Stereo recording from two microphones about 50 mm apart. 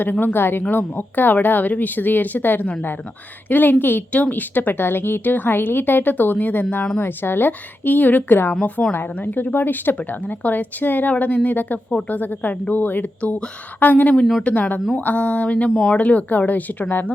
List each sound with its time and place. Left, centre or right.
0.0 s a woman's voice: left
14.4 s speech: left